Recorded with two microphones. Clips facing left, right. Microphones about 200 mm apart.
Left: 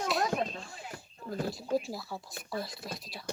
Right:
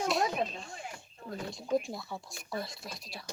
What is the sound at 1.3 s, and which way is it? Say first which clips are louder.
Speech: left 1 dB; 5° left (ahead or behind).